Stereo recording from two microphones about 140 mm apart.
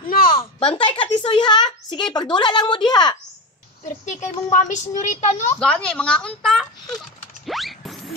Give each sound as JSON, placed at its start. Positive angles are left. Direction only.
{"t": 0.1, "sound": "a sound", "side_deg": 90}
{"t": 0.4, "sound": "a woman's voice", "side_deg": 45}
{"t": 4.0, "sound": "a woman's voice", "side_deg": 65}
{"t": 5.6, "sound": "a woman's voice", "side_deg": 5}
{"t": 7.4, "sound": "mechanisms", "side_deg": 0}